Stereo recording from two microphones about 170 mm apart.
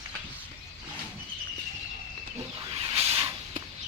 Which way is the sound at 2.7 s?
35° right (ahead or behind).